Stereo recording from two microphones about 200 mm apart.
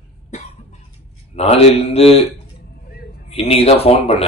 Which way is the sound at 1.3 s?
30° left (ahead or behind).